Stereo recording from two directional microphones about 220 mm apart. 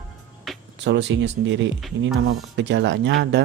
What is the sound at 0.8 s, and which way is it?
Speech, 55° right (ahead or behind).